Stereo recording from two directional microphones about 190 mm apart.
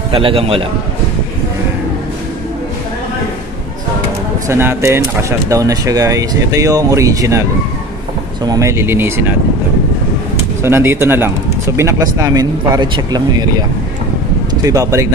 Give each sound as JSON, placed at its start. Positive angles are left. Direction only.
{"t": 0.1, "sound": "speech", "side_deg": -30}
{"t": 4.5, "sound": "speech", "side_deg": -15}
{"t": 8.5, "sound": "speech", "side_deg": -15}
{"t": 10.6, "sound": "speech", "side_deg": -10}